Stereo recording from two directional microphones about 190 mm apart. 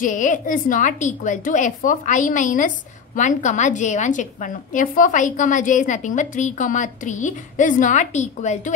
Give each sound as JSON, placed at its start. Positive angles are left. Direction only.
{"t": 0.0, "sound": "a woman's voice", "side_deg": 45}